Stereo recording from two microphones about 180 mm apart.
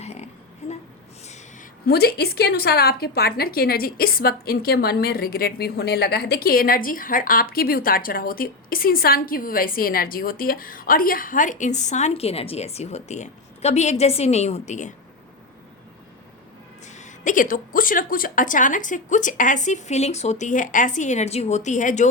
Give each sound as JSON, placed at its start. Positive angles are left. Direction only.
{"t": 0.0, "sound": "a sound", "side_deg": 35}
{"t": 1.9, "sound": "a woman's voice", "side_deg": 60}
{"t": 16.8, "sound": "a woman's voice", "side_deg": 40}